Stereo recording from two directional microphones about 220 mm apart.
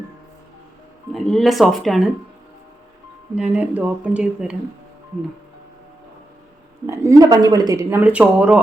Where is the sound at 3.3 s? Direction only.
5° right (ahead or behind).